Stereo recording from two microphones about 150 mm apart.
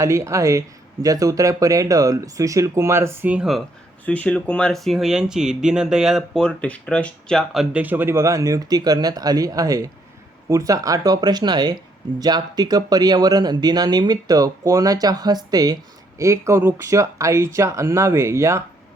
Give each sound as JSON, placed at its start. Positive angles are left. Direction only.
{"t": 0.0, "sound": "speech", "side_deg": -20}
{"t": 4.0, "sound": "speech", "side_deg": 10}